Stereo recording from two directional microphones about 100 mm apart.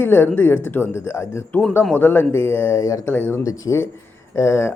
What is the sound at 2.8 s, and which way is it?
Speech, 35° left (ahead or behind).